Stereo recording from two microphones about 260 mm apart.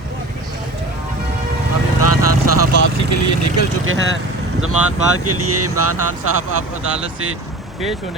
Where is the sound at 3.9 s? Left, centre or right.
Right.